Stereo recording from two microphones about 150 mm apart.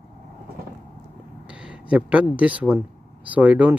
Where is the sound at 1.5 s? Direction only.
5° right (ahead or behind).